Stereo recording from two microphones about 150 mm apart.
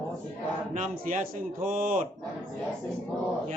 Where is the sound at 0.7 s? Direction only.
60° right (ahead or behind).